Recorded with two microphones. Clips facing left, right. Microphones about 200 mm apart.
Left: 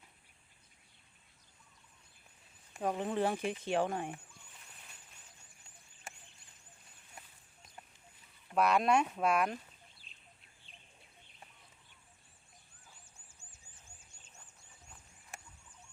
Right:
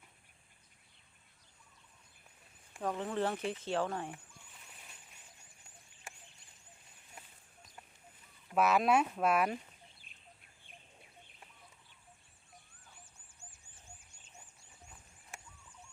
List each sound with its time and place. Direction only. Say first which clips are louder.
2.8 s speech: left 2 dB; 20° left (ahead or behind)
8.5 s speech: even; 5° right (ahead or behind)
10.1 s bird: even; 55° right (ahead or behind)